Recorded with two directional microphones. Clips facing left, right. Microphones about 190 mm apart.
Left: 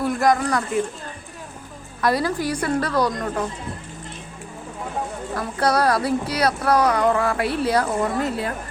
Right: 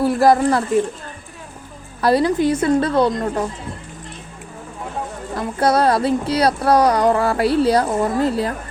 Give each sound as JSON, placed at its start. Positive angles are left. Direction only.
{"t": 0.0, "sound": "speech", "side_deg": -30}
{"t": 2.0, "sound": "a woman's voice", "side_deg": -30}
{"t": 5.4, "sound": "speech", "side_deg": -25}